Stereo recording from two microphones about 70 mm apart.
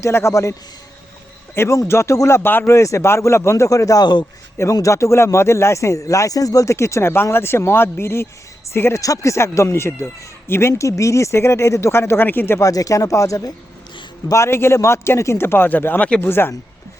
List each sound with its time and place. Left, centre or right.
0.0 s speech: left
1.5 s speech: left
2.6 s speech: left
4.0 s a man's voice: left
4.7 s speech: left
12.5 s speech: left
14.3 s speech: left